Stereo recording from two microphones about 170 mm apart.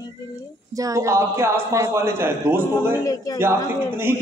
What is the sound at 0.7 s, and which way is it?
A man's voice, 20° right (ahead or behind).